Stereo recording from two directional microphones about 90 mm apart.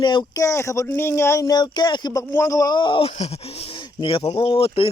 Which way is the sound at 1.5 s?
50° left (ahead or behind).